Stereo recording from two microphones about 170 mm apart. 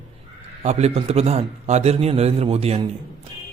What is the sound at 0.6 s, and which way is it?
Speech, 40° right (ahead or behind).